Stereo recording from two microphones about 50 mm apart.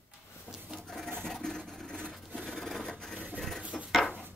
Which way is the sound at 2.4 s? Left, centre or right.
Centre.